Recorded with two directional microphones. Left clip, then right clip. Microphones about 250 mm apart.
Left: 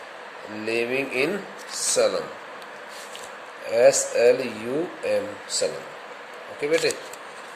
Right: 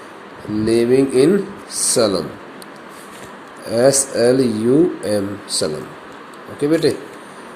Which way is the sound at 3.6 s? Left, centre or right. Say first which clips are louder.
Right 3 dB; centre.